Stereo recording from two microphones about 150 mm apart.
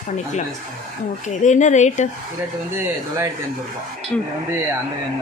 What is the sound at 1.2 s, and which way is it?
Speech, 55° left (ahead or behind).